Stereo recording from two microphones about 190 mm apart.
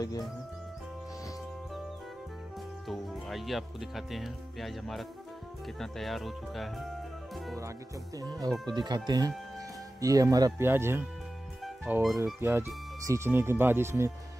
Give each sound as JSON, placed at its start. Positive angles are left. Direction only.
{"t": 2.9, "sound": "speech", "side_deg": 0}
{"t": 8.2, "sound": "speech", "side_deg": -20}
{"t": 11.6, "sound": "music", "side_deg": 0}
{"t": 12.4, "sound": "speech", "side_deg": -10}